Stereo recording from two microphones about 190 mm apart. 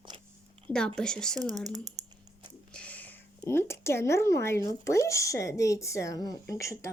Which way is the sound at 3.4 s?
15° left (ahead or behind).